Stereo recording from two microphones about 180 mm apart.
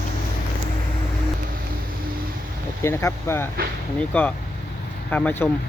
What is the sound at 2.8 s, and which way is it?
Speech, 15° left (ahead or behind).